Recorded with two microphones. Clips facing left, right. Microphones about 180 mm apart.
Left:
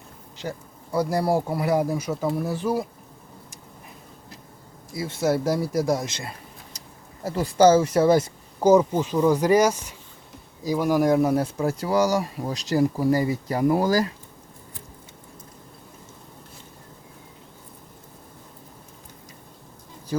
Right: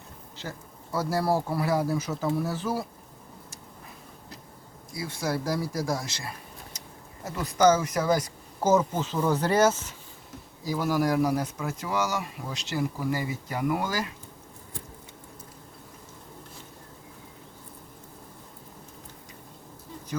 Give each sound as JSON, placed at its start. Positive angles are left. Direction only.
{"t": 0.3, "sound": "speech", "side_deg": 15}
{"t": 4.9, "sound": "speech", "side_deg": 25}
{"t": 7.3, "sound": "speech", "side_deg": 30}
{"t": 8.6, "sound": "speech", "side_deg": 15}